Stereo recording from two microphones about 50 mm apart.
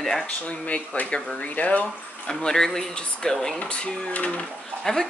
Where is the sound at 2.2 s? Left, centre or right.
Centre.